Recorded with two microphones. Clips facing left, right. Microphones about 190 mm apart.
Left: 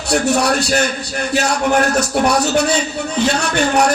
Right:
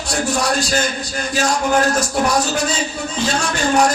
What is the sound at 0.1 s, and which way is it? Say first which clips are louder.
Music: left 4 dB; 65° left (ahead or behind).